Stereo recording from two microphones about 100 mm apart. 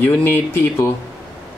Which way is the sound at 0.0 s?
20° left (ahead or behind).